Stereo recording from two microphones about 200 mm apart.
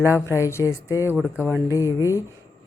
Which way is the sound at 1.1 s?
5° right (ahead or behind).